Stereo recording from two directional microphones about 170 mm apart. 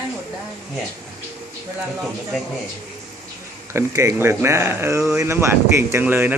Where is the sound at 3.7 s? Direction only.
20° right (ahead or behind).